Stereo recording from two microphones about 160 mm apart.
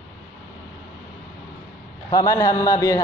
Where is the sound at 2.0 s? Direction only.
20° left (ahead or behind).